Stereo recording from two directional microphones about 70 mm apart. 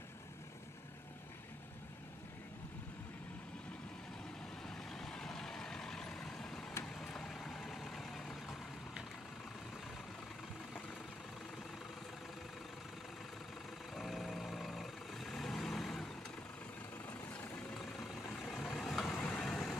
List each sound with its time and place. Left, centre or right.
4.6 s vehicle: centre
13.9 s vehicle: centre
18.4 s vehicle: left
18.7 s vehicle: centre